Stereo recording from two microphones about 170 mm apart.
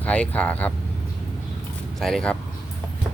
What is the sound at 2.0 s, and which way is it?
Speech, centre (ahead or behind).